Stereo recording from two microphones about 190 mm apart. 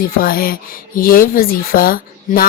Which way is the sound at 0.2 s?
50° left (ahead or behind).